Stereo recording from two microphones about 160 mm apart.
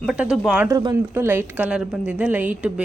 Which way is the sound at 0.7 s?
25° right (ahead or behind).